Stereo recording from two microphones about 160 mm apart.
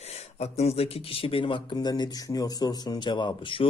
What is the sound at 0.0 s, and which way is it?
Speech, 40° left (ahead or behind).